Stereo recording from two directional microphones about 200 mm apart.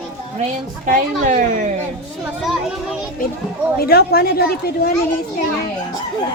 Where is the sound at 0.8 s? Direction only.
40° right (ahead or behind).